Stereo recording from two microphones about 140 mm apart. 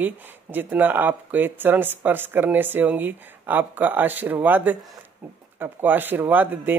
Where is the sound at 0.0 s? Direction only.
15° right (ahead or behind).